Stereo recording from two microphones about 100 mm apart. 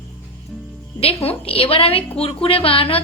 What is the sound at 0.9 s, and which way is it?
A woman's voice, 80° left.